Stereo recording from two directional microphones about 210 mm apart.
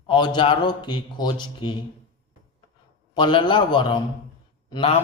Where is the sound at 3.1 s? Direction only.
25° left (ahead or behind).